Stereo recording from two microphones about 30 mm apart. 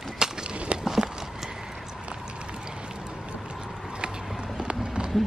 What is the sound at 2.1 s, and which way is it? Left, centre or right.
Run, right.